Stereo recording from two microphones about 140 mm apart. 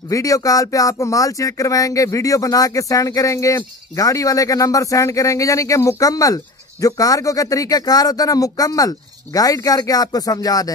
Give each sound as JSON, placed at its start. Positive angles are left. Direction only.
{"t": 0.1, "sound": "speech", "side_deg": 25}